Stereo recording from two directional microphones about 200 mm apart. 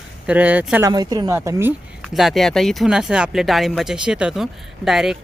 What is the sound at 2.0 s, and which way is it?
Speech, centre (ahead or behind).